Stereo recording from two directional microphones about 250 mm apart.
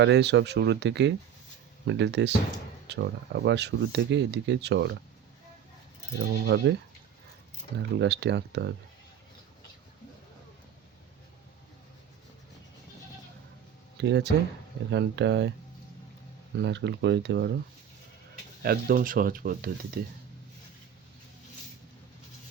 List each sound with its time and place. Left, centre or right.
0.0 s speech: right
6.4 s speech: right
7.8 s speech: right
14.0 s speech: right
16.6 s speech: right
18.6 s speech: right